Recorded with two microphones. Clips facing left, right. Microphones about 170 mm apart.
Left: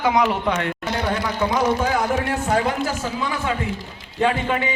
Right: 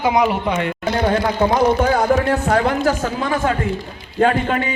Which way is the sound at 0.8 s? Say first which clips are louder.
Right 6 dB; 50° right (ahead or behind).